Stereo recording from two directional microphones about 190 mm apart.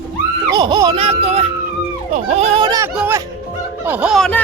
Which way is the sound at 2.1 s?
35° right (ahead or behind).